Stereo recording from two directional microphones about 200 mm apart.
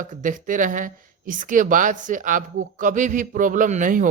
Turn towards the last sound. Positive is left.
turn(degrees=-40)  # may be behind; listen again after turning